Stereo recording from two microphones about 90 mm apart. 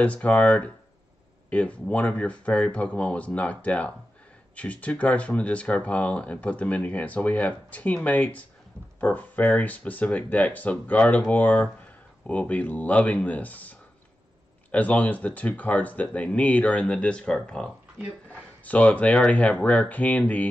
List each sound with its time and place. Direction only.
0.0 s speech: 15° left (ahead or behind)